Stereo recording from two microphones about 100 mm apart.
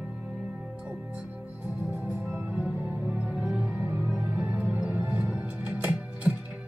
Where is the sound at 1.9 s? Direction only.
20° right (ahead or behind).